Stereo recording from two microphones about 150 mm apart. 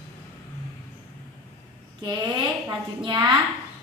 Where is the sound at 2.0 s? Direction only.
30° right (ahead or behind).